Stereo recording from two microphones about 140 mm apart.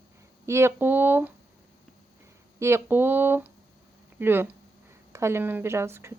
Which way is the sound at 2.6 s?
20° right (ahead or behind).